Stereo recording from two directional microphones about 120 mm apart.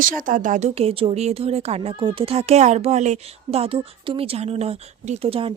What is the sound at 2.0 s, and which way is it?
Speech, 45° right (ahead or behind).